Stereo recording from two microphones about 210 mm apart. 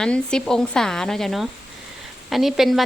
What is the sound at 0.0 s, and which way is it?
Speech, 5° left (ahead or behind).